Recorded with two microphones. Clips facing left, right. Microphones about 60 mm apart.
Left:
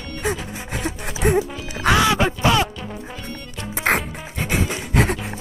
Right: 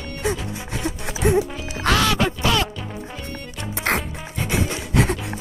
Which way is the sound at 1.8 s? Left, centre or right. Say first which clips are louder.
Left 2 dB; centre.